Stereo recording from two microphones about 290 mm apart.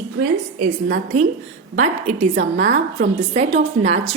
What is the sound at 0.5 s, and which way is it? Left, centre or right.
A woman's voice, right.